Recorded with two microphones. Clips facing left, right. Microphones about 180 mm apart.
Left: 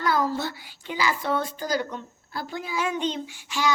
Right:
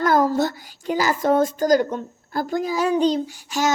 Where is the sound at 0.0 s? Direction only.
45° right (ahead or behind).